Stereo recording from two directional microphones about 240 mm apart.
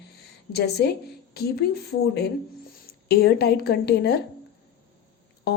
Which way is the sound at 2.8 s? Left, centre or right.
Left.